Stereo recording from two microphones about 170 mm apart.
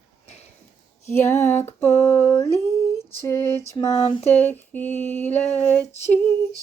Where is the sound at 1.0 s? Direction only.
15° left (ahead or behind).